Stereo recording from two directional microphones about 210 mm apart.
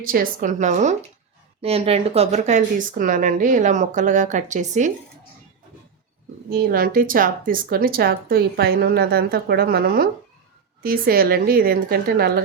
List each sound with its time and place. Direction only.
0.0 s speech: 40° right (ahead or behind)
6.5 s speech: 45° right (ahead or behind)